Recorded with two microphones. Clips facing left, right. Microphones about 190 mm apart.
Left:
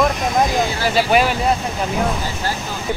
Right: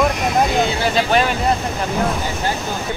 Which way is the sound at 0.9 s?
10° left (ahead or behind).